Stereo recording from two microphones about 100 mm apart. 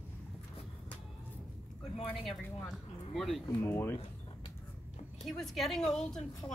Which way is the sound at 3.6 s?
20° left (ahead or behind).